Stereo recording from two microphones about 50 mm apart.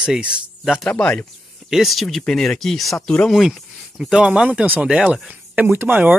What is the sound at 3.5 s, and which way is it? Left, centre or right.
Speech, centre.